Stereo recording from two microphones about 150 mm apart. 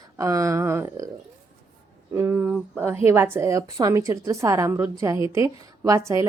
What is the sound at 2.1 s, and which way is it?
A woman's voice, 15° right (ahead or behind).